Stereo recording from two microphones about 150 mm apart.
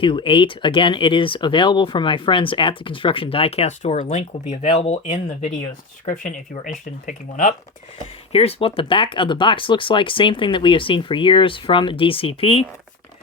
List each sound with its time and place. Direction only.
0.0 s speech: 35° left (ahead or behind); by 7.5 s 60° left (ahead or behind)
8.3 s speech: 40° left (ahead or behind)